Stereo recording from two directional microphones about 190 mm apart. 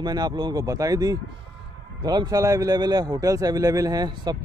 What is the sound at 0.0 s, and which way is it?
A man's voice, 20° right (ahead or behind).